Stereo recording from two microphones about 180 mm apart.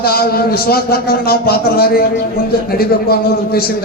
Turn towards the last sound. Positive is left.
turn(degrees=60)  # may be behind; listen again after turning